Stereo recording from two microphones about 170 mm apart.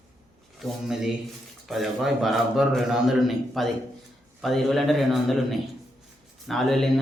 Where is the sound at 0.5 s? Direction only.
Centre (ahead or behind).